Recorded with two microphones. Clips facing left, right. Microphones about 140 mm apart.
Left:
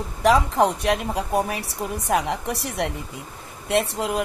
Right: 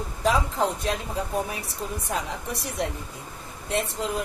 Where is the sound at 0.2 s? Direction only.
75° left (ahead or behind).